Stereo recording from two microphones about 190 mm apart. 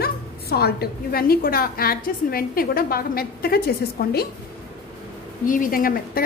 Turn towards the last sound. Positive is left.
turn(degrees=50)  # may be behind; listen again after turning